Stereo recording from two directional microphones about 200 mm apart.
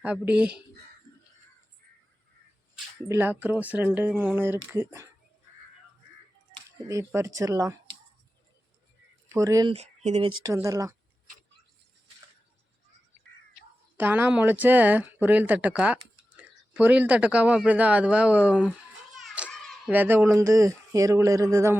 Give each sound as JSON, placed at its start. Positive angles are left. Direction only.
{"t": 0.0, "sound": "speech", "side_deg": -5}
{"t": 3.1, "sound": "speech", "side_deg": -10}
{"t": 6.7, "sound": "speech", "side_deg": -15}
{"t": 9.3, "sound": "speech", "side_deg": -15}
{"t": 9.7, "sound": "speech", "side_deg": -35}
{"t": 10.4, "sound": "speech", "side_deg": -15}
{"t": 13.9, "sound": "speech", "side_deg": -10}
{"t": 19.4, "sound": "children playing", "side_deg": -5}
{"t": 19.9, "sound": "speech", "side_deg": -10}